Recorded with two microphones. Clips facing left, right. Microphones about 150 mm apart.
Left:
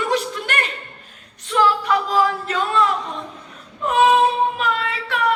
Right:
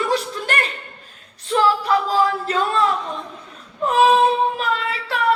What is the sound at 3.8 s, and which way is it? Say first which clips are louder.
Child singing: right 1 dB; 35° right (ahead or behind).